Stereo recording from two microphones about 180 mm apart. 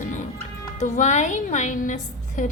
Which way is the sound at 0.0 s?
45° left (ahead or behind).